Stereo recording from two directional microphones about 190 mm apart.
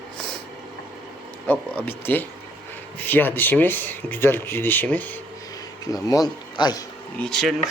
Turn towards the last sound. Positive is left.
turn(degrees=0)  # may be behind; listen again after turning